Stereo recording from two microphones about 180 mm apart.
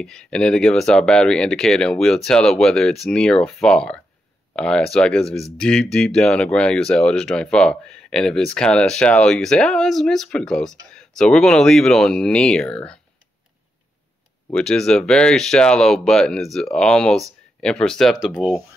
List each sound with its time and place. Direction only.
0.0 s speech: 5° left (ahead or behind)
14.5 s speech: 5° left (ahead or behind)